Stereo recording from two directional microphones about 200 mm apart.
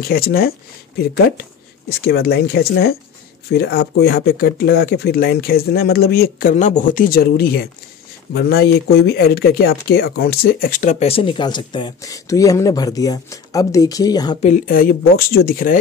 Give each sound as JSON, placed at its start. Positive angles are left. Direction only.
{"t": 0.0, "sound": "speech", "side_deg": 50}
{"t": 14.4, "sound": "speech", "side_deg": 40}